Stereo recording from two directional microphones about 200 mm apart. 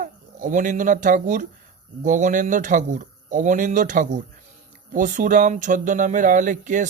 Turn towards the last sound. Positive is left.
turn(degrees=-40)  # may be behind; listen again after turning